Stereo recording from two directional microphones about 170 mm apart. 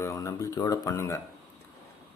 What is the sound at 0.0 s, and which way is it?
Speech, 20° left (ahead or behind).